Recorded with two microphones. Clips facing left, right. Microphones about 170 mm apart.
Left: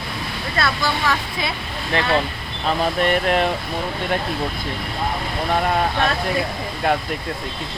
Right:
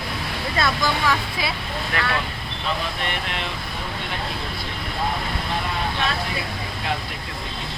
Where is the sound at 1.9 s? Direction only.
25° left (ahead or behind).